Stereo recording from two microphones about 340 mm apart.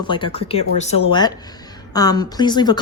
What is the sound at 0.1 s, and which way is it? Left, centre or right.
Speech, centre.